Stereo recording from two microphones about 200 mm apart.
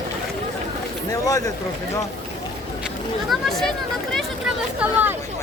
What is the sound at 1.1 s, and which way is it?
Speech, 15° left (ahead or behind).